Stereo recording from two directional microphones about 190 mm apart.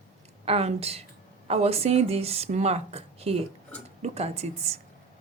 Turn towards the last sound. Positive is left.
turn(degrees=-35)  # may be behind; listen again after turning